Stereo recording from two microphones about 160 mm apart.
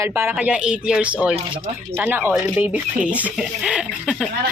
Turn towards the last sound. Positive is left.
turn(degrees=-5)  # may be behind; listen again after turning